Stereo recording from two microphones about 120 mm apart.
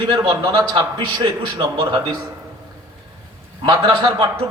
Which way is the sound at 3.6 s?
40° right (ahead or behind).